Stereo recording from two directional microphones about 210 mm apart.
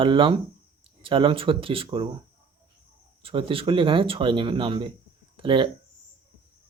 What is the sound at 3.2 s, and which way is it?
Speech, 25° right (ahead or behind).